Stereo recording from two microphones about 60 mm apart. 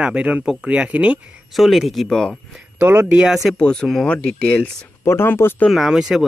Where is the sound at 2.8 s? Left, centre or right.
Right.